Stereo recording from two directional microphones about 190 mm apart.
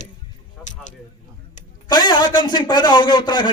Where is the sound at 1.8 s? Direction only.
20° left (ahead or behind).